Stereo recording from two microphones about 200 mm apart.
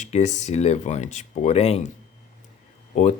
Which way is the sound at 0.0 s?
35° left (ahead or behind).